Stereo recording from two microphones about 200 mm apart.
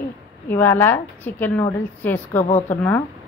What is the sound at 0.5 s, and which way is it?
A woman's voice, 10° left (ahead or behind).